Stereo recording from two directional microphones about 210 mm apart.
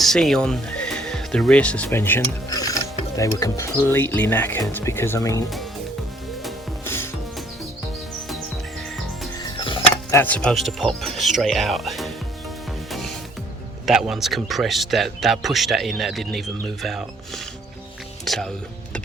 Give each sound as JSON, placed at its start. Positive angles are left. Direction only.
{"t": 0.0, "sound": "speech", "side_deg": 0}
{"t": 6.8, "sound": "music", "side_deg": 10}
{"t": 9.4, "sound": "music", "side_deg": 25}
{"t": 10.2, "sound": "speech", "side_deg": 5}
{"t": 12.9, "sound": "music", "side_deg": 0}
{"t": 13.8, "sound": "speech", "side_deg": 0}